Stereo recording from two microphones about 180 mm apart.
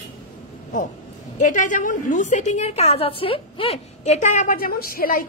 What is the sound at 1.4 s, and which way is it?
A woman's voice, 45° left (ahead or behind).